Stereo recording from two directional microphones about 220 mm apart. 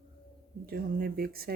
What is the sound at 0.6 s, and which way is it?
Speech, 40° right (ahead or behind).